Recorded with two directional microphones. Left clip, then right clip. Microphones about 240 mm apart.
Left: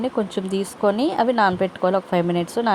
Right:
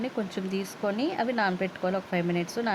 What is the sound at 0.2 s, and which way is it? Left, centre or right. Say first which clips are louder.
Speech: left 8 dB; centre.